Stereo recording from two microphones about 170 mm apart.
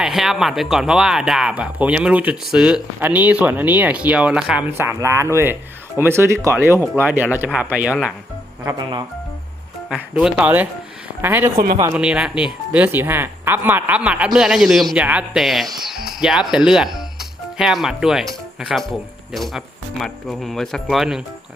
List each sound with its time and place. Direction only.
0.0 s speech: centre (ahead or behind)
4.8 s speech: 15° right (ahead or behind)
8.6 s speech: 25° right (ahead or behind)
9.9 s speech: 5° right (ahead or behind)
17.2 s music: centre (ahead or behind)
18.6 s speech: centre (ahead or behind)